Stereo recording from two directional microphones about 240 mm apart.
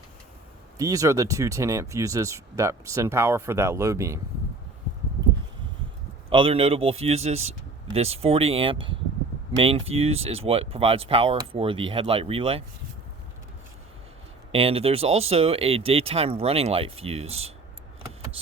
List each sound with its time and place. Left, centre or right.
0.8 s speech: centre
6.3 s speech: right
14.5 s speech: right